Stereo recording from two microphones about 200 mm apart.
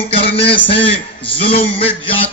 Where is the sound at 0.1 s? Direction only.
30° left (ahead or behind).